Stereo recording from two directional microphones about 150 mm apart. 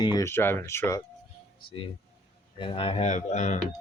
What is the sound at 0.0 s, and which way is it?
Speech, 30° left (ahead or behind).